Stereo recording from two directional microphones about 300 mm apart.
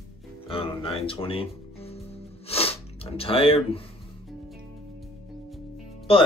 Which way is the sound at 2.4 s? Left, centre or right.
Centre.